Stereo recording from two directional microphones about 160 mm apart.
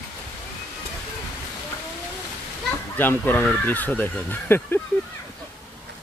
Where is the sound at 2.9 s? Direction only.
10° left (ahead or behind).